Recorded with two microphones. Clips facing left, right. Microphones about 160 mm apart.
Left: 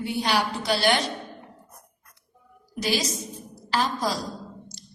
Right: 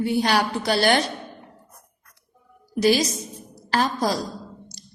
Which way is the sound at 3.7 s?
45° right (ahead or behind).